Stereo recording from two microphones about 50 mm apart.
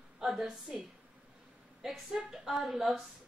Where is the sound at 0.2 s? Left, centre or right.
Centre.